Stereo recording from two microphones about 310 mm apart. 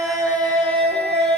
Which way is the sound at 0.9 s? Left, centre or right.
Right.